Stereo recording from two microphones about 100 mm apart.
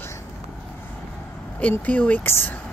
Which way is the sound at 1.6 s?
15° left (ahead or behind).